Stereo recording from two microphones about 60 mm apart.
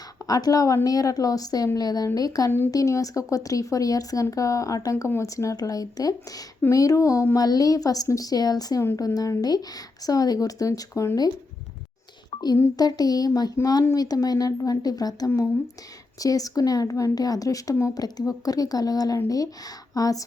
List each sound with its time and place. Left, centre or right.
0.2 s a woman's voice: left
0.9 s speech: left
2.7 s speech: left
6.7 s speech: left
7.3 s speech: left
12.7 s speech: left